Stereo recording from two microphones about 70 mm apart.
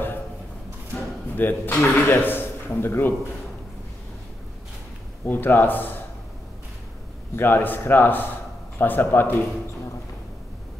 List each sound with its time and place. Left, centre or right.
1.3 s a man's voice: left
5.2 s speech: left
7.3 s speech: left